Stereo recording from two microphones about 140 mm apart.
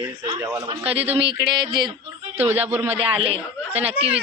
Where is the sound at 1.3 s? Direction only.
30° right (ahead or behind).